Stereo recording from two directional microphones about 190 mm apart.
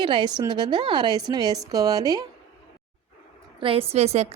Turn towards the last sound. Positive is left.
turn(degrees=-35)  # may be behind; listen again after turning